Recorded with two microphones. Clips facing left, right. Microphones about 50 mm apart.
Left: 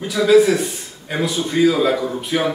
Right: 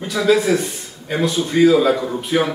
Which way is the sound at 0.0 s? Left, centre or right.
Centre.